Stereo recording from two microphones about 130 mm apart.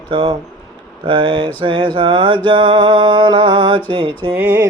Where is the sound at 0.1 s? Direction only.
40° right (ahead or behind).